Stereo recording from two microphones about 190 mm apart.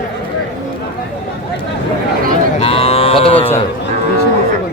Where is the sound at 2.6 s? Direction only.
30° left (ahead or behind).